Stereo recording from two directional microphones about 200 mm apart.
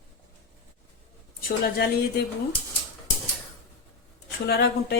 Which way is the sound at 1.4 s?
45° left (ahead or behind).